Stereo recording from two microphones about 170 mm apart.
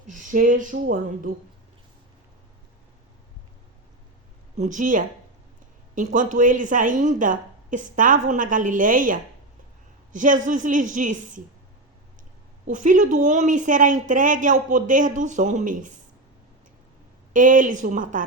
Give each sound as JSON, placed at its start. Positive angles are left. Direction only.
{"t": 0.1, "sound": "a woman's voice", "side_deg": -50}
{"t": 4.5, "sound": "a woman's voice", "side_deg": -45}
{"t": 12.6, "sound": "a woman's voice", "side_deg": -50}
{"t": 17.3, "sound": "a woman's voice", "side_deg": -50}